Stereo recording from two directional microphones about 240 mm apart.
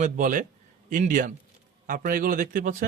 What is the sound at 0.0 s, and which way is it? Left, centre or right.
Speech, right.